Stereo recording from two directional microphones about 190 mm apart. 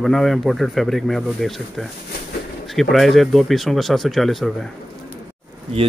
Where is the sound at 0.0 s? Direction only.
Centre (ahead or behind).